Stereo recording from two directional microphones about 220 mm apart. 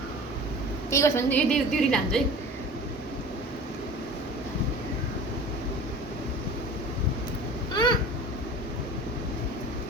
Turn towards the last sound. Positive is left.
turn(degrees=20)  # may be behind; listen again after turning